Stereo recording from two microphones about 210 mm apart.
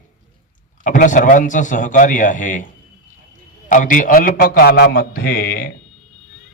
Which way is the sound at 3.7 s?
40° left (ahead or behind).